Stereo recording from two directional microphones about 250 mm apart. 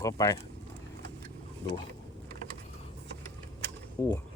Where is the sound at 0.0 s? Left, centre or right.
Centre.